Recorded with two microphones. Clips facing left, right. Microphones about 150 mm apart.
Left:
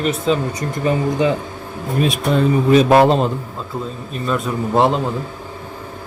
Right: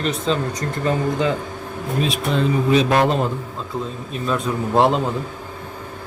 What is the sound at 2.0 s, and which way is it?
Speech, 50° left (ahead or behind).